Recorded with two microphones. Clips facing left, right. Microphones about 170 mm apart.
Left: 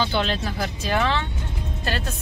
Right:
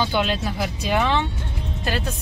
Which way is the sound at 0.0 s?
10° right (ahead or behind).